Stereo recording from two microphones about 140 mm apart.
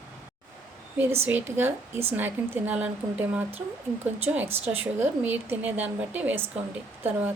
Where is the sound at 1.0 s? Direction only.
15° right (ahead or behind).